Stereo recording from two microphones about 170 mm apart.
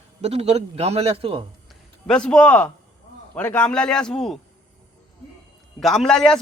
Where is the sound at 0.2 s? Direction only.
40° right (ahead or behind).